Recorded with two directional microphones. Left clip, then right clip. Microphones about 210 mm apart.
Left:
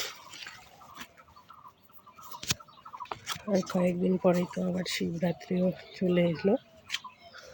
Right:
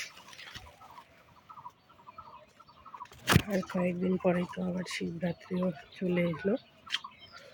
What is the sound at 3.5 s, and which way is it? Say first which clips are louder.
Speech: left 4 dB; 25° left (ahead or behind).